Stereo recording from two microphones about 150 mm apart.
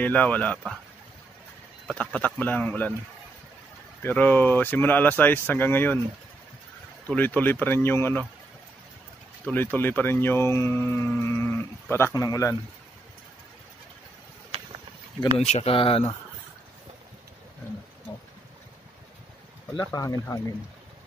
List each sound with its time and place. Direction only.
0.0 s speech: 10° left (ahead or behind)
1.9 s speech: 5° left (ahead or behind)
4.0 s speech: 10° left (ahead or behind)
7.1 s speech: 10° left (ahead or behind)
9.5 s speech: 10° left (ahead or behind)
15.3 s speech: 45° left (ahead or behind)
19.7 s speech: 25° left (ahead or behind)